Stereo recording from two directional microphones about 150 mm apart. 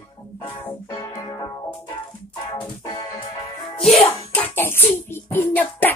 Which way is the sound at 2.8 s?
30° left (ahead or behind).